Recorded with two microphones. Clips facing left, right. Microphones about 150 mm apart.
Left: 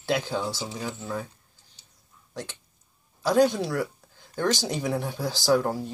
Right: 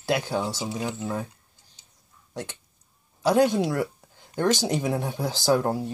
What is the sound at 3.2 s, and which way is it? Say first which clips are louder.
Speech: right 1 dB; 20° right (ahead or behind).